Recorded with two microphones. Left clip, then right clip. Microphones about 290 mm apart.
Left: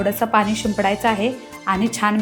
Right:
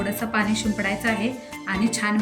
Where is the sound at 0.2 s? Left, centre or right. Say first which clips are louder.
Left 5 dB; centre.